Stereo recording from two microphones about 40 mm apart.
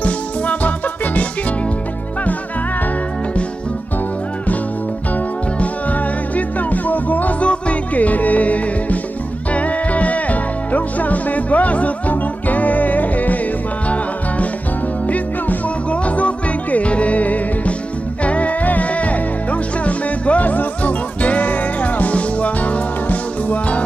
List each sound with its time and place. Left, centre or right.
0.0 s music: left
5.1 s music: left
15.0 s music: left